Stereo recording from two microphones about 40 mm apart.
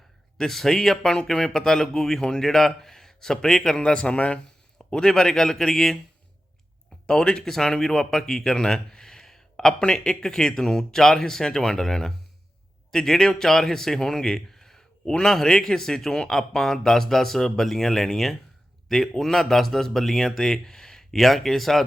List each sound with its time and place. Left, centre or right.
0.3 s a man's voice: centre; by 4.4 s left
4.9 s speech: centre
7.1 s a man's voice: centre